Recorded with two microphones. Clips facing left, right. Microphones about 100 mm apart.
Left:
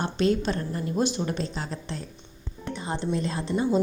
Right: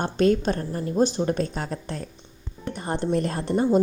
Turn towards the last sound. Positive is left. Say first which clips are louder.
# right 4 dB
turn(degrees=-50)  # may be behind; listen again after turning